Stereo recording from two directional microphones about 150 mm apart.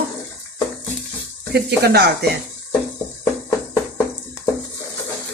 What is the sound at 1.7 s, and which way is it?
Speech, 90° right.